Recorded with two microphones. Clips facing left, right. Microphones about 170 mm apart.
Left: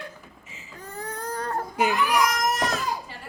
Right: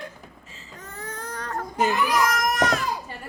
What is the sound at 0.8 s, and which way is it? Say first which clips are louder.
Baby cry: left 3 dB; 35° left (ahead or behind).